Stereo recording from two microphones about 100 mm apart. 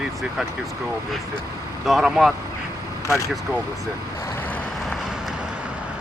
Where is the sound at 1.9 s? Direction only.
5° right (ahead or behind).